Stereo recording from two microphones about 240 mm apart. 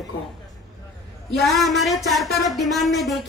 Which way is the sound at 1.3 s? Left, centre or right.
Centre.